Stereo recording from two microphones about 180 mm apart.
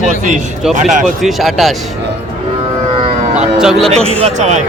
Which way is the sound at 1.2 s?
Centre (ahead or behind).